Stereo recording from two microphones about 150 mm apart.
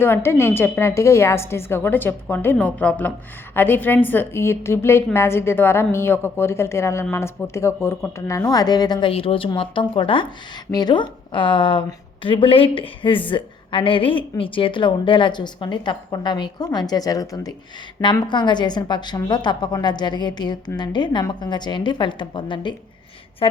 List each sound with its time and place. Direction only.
0.0 s a woman's voice: 15° left (ahead or behind); by 23.6 s 35° left (ahead or behind)